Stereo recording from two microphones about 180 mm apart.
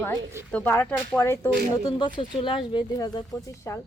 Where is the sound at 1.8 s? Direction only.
25° left (ahead or behind).